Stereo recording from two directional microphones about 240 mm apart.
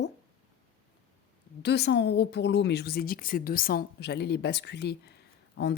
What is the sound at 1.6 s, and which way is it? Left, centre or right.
Speech, left.